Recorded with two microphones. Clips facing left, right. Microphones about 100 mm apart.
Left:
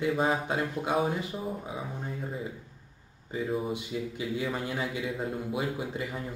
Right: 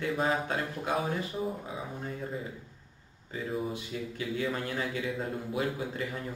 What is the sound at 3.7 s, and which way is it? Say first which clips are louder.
A man's voice: left 3 dB; 15° left (ahead or behind).